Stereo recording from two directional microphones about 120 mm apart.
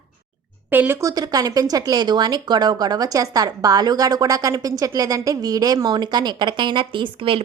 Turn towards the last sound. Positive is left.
turn(degrees=-45)  # may be behind; listen again after turning